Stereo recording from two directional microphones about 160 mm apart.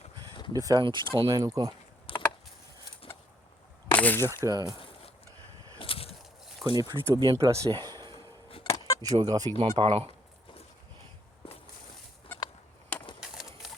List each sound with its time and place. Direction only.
0.5 s speech: 25° right (ahead or behind)
1.3 s speech: 20° right (ahead or behind)
2.1 s a sound: 35° left (ahead or behind)
3.9 s speech: 10° left (ahead or behind)
4.4 s speech: 25° right (ahead or behind)
5.8 s a sound: 35° left (ahead or behind)
6.7 s speech: 25° right (ahead or behind)
8.6 s keys jangling: 20° left (ahead or behind)
9.0 s speech: 25° right (ahead or behind)
13.2 s bird: 5° right (ahead or behind)